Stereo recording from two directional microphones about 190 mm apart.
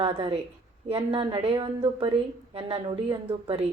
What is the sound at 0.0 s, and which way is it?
A woman's voice, 30° right (ahead or behind).